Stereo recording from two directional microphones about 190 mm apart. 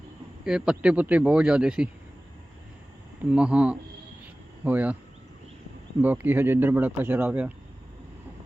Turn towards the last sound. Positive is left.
turn(degrees=-10)  # may be behind; listen again after turning